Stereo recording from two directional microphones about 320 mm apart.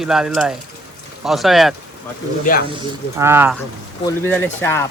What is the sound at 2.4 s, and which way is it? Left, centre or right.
Speech, left.